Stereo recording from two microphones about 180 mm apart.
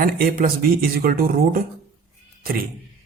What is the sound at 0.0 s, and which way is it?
A man's voice, 55° right (ahead or behind).